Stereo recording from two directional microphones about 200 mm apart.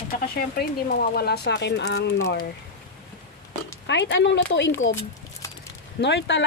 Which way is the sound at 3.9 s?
60° left (ahead or behind).